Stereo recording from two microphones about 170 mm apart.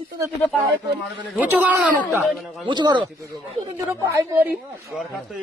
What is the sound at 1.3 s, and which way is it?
A woman's voice, 10° right (ahead or behind).